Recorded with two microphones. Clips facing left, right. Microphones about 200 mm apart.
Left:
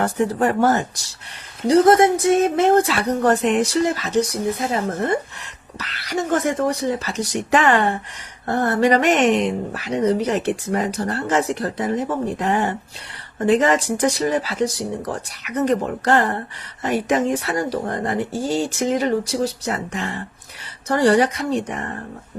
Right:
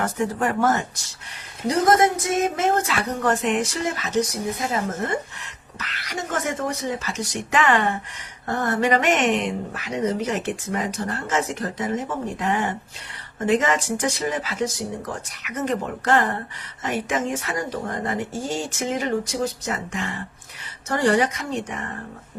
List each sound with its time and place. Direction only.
0.0 s speech: 35° left (ahead or behind)